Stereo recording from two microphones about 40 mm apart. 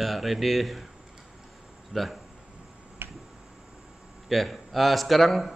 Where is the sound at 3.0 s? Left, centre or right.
Right.